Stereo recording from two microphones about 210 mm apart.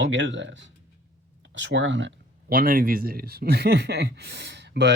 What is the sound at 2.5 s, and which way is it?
A man's voice, 45° right (ahead or behind).